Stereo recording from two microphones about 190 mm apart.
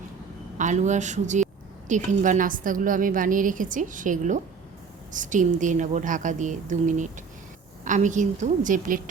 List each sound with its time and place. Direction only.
0.6 s a woman's voice: 40° right (ahead or behind)